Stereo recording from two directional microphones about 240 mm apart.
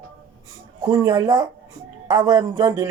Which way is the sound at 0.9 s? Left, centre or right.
Centre.